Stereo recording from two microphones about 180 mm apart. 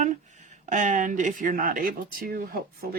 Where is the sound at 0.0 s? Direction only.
40° right (ahead or behind).